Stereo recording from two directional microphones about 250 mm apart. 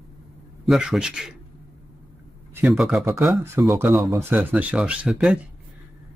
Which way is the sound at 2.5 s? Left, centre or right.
Centre.